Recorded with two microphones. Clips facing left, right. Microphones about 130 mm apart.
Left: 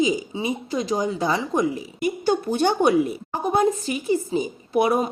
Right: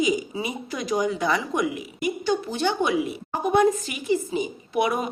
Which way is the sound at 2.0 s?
50° left (ahead or behind).